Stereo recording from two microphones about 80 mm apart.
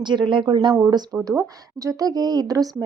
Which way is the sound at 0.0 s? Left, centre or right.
Right.